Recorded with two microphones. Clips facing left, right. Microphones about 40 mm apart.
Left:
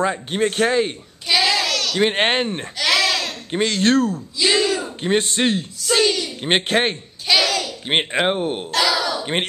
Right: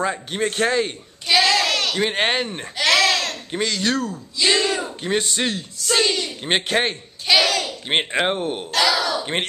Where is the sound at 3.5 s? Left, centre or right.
Left.